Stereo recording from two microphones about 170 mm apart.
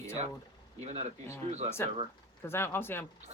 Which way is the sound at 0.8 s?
40° right (ahead or behind).